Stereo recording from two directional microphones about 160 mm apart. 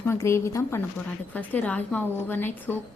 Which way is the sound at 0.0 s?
15° left (ahead or behind).